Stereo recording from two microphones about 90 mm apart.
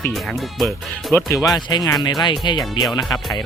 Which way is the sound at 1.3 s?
40° left (ahead or behind).